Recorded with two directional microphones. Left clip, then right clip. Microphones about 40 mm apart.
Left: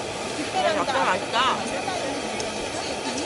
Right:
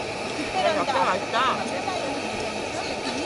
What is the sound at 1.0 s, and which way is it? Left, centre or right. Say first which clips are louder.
Speech: even; left.